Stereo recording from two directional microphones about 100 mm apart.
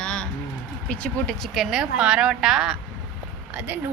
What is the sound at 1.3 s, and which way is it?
A woman's voice, centre (ahead or behind).